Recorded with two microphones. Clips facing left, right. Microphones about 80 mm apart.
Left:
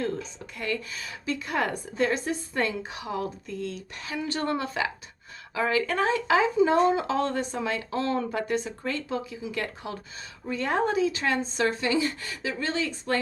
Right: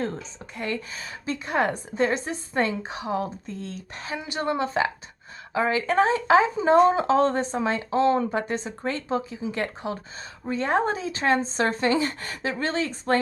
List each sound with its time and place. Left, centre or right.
0.0 s a woman's voice: right
4.2 s a woman's voice: centre; by 13.1 s right